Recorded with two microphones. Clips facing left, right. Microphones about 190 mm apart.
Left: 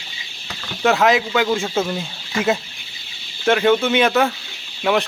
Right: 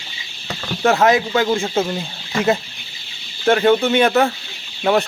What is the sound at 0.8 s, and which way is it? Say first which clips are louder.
Speech: right 1 dB; 30° right (ahead or behind).